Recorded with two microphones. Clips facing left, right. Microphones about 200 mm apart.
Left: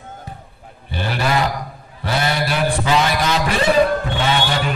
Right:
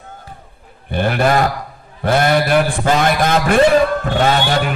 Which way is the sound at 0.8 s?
55° right (ahead or behind).